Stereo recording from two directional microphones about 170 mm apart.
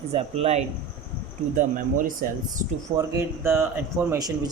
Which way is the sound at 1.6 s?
50° right (ahead or behind).